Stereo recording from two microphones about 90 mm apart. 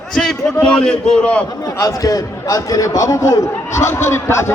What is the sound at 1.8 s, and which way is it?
A man's voice, 40° left (ahead or behind).